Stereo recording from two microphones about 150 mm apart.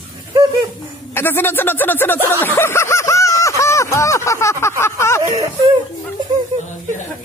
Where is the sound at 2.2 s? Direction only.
15° left (ahead or behind).